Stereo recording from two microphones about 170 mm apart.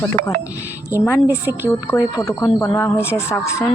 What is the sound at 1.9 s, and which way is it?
Speech, 20° left (ahead or behind).